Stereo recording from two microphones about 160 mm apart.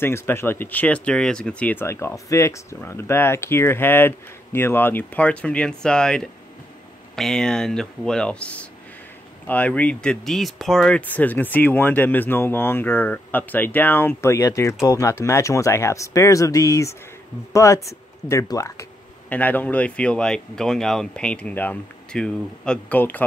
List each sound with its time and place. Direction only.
0.0 s speech: 15° left (ahead or behind)